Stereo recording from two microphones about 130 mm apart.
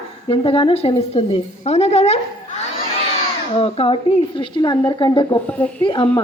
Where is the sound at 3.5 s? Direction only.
50° left (ahead or behind).